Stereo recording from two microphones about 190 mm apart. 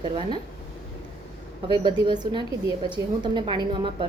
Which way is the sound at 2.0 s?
25° right (ahead or behind).